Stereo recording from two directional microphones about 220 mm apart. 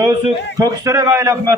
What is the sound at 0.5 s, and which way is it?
A man's voice, 15° right (ahead or behind).